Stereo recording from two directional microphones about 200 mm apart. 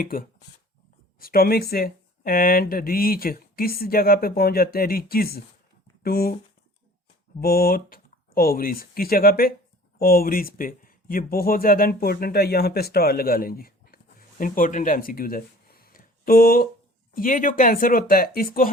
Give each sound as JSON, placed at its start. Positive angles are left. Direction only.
{"t": 0.0, "sound": "speech", "side_deg": 45}
{"t": 7.4, "sound": "speech", "side_deg": 50}